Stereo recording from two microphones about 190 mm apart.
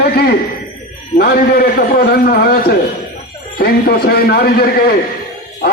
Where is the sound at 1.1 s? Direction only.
55° left (ahead or behind).